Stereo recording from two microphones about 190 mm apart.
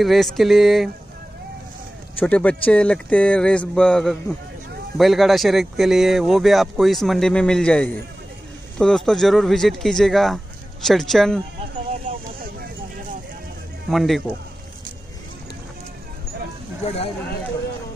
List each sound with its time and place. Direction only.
0.0 s speech: centre (ahead or behind)
2.1 s speech: 5° left (ahead or behind)
13.8 s speech: centre (ahead or behind)
16.8 s speech: 30° left (ahead or behind)